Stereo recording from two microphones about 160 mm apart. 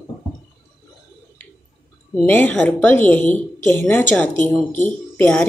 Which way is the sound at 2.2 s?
10° left (ahead or behind).